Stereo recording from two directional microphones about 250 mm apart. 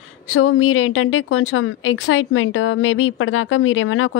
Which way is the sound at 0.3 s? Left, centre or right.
Left.